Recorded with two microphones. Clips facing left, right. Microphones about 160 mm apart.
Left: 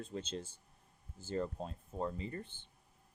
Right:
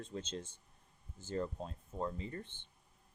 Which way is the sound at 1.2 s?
35° left (ahead or behind).